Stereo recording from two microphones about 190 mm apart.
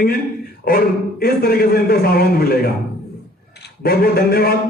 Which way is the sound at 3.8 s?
55° left (ahead or behind).